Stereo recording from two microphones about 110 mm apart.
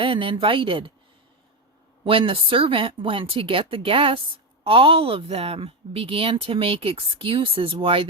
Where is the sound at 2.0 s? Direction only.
55° right (ahead or behind).